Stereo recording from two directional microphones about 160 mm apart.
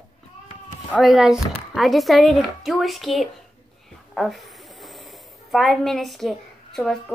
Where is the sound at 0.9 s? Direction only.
Centre (ahead or behind).